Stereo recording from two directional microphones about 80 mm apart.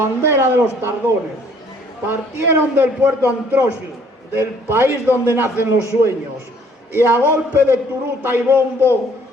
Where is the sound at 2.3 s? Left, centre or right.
Right.